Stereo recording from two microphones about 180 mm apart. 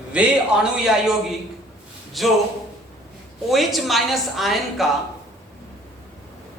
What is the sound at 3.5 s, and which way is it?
Speech, centre (ahead or behind).